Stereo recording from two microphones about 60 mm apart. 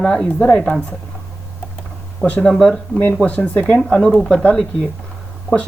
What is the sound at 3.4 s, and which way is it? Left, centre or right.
Speech, left.